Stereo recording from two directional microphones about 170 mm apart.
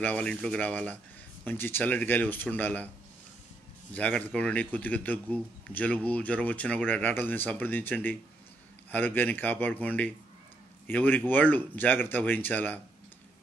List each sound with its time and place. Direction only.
0.0 s a man's voice: 10° left (ahead or behind)
3.9 s a man's voice: 10° left (ahead or behind)